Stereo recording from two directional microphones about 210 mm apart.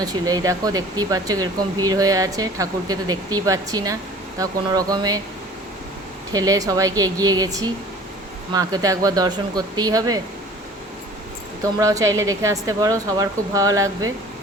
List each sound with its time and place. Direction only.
0.0 s speech: 20° right (ahead or behind)
6.3 s speech: 15° right (ahead or behind)
11.6 s speech: 15° right (ahead or behind)